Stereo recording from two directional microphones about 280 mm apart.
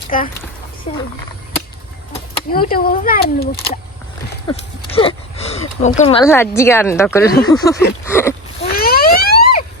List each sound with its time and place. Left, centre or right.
0.1 s speech: left
2.5 s speech: left
4.4 s speech: centre
6.2 s speech: centre
8.0 s a sound: centre
8.6 s a sound: left